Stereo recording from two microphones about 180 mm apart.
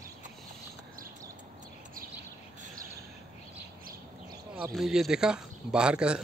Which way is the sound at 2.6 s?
50° right (ahead or behind).